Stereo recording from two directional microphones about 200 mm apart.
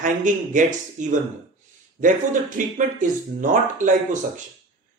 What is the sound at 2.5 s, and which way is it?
Speech, 40° right (ahead or behind).